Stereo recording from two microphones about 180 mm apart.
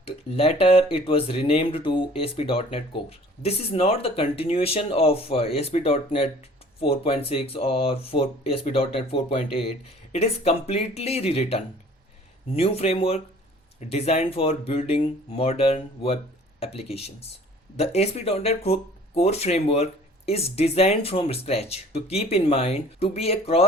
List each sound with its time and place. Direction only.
0.0 s speech: 35° left (ahead or behind)